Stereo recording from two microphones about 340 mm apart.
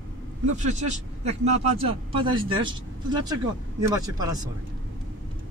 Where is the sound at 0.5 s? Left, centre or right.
Right.